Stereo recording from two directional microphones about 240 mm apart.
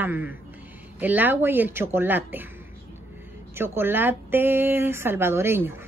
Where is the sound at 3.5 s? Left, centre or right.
Centre.